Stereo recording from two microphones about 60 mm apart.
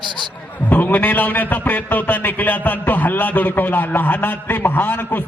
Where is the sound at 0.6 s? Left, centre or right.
Left.